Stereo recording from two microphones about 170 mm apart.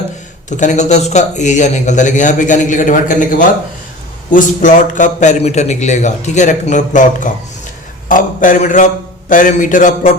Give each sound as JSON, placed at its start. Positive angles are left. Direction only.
{"t": 0.5, "sound": "a man's voice", "side_deg": 45}